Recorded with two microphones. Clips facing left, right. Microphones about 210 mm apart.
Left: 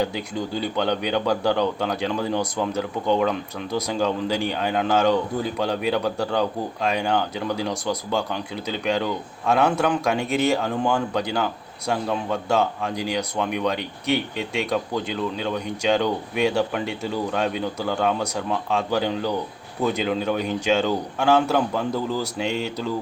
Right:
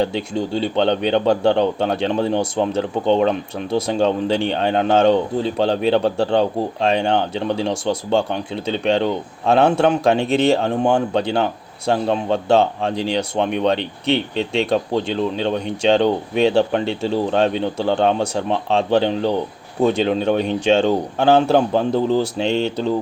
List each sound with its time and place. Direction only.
0.0 s speech: 25° right (ahead or behind)